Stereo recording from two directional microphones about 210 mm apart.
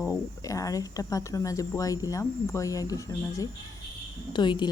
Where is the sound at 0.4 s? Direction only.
15° left (ahead or behind).